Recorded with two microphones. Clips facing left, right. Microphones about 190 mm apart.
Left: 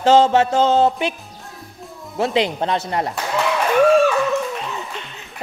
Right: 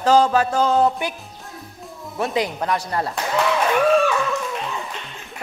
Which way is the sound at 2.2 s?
25° left (ahead or behind).